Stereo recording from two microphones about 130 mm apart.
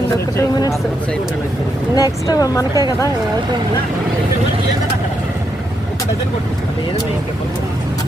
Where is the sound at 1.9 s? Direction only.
30° left (ahead or behind).